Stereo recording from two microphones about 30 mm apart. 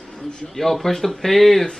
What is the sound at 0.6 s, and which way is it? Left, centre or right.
Speech, centre.